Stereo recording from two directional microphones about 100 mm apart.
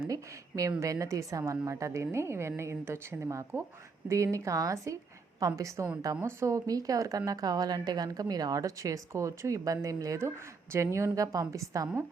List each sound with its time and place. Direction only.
0.1 s a woman's voice: 35° right (ahead or behind)